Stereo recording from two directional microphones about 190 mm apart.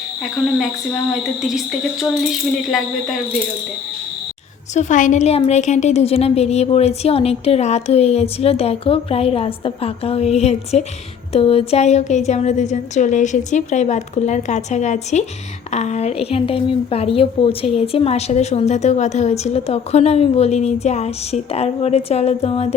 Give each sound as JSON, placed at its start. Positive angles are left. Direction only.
{"t": 1.4, "sound": "speech", "side_deg": 0}
{"t": 4.7, "sound": "speech", "side_deg": 40}